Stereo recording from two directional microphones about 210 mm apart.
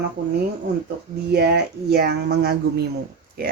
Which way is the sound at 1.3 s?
50° right (ahead or behind).